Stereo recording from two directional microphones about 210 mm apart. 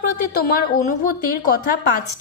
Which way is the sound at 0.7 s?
40° left (ahead or behind).